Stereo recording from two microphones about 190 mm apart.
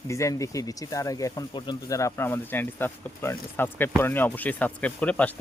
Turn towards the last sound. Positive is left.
turn(degrees=5)  # may be behind; listen again after turning